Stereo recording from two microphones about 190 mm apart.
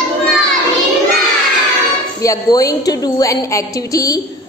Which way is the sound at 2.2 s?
20° left (ahead or behind).